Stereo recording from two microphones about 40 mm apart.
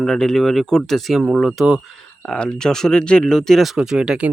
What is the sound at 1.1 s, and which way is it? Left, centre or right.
Speech, centre.